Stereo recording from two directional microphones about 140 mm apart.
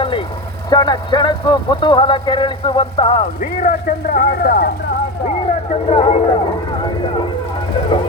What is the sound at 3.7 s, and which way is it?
Speech, 90° left.